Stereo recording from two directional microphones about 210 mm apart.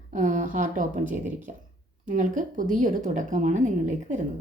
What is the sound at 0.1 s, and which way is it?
Speech, 40° right (ahead or behind).